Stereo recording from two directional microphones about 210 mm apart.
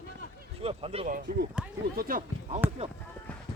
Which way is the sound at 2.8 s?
30° right (ahead or behind).